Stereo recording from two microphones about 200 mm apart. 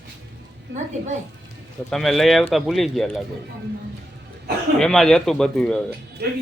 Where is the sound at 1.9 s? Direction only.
Centre (ahead or behind).